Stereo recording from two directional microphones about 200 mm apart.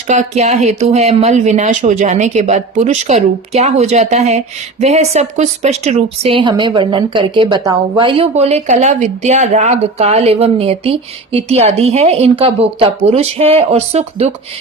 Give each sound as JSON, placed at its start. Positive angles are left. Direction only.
{"t": 0.1, "sound": "speech", "side_deg": -35}